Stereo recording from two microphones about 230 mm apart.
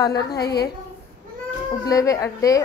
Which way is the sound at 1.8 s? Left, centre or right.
Centre.